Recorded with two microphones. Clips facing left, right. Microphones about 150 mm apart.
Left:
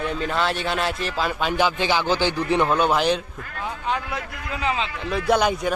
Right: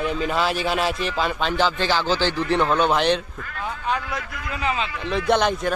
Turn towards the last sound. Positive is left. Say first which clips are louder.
# even
turn(degrees=5)  # may be behind; listen again after turning